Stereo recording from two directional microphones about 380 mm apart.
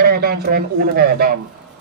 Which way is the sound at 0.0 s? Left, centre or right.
Right.